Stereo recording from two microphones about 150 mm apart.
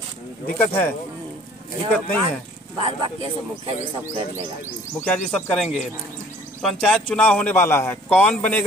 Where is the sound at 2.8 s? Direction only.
40° right (ahead or behind).